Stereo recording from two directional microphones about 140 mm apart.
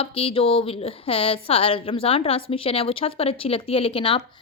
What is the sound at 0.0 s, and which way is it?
Speech, 45° left (ahead or behind).